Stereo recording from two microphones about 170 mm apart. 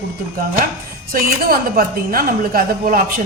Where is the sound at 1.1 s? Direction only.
60° right (ahead or behind).